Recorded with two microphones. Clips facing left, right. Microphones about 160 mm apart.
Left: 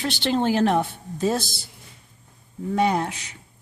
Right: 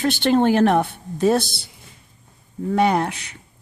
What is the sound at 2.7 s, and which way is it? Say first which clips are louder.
Speech: right 3 dB; 65° right (ahead or behind).